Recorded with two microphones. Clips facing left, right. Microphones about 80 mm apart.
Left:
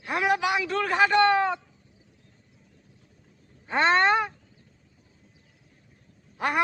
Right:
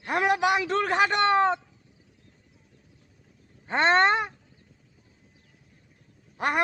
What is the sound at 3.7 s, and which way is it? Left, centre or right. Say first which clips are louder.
Speech: even; right.